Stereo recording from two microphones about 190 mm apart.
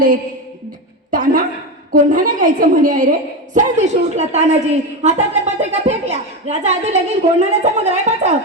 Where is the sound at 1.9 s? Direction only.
45° right (ahead or behind).